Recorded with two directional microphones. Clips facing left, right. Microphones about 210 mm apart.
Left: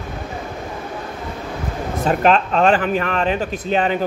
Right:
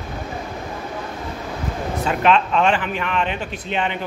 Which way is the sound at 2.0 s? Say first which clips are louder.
Left 2 dB; 40° left (ahead or behind).